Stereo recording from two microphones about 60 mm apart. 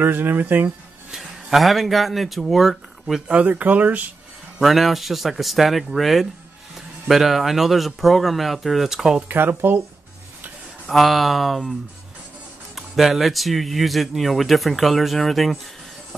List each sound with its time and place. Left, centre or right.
0.0 s speech: right
1.1 s speech: centre
3.2 s speech: centre
3.4 s speech: right
4.6 s speech: centre
9.3 s speech: right
10.9 s speech: centre
12.7 s speech: centre